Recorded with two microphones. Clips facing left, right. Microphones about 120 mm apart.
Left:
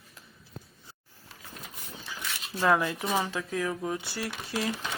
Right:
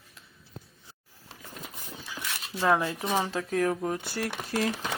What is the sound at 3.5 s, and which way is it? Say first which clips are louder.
Speech: right 6 dB; 45° right (ahead or behind).